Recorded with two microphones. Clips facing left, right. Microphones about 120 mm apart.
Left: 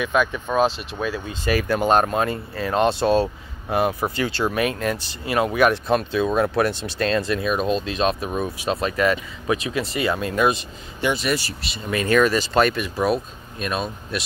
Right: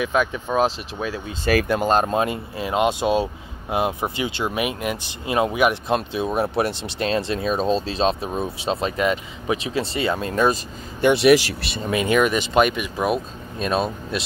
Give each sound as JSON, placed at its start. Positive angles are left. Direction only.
{"t": 0.0, "sound": "speech", "side_deg": -25}
{"t": 11.0, "sound": "speech", "side_deg": -65}
{"t": 11.9, "sound": "speech", "side_deg": -20}
{"t": 13.6, "sound": "speech", "side_deg": -30}